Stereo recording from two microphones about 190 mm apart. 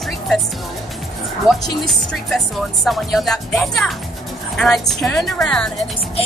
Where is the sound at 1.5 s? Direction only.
Centre (ahead or behind).